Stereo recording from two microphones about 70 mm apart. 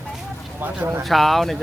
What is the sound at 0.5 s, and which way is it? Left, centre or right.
Speech, right.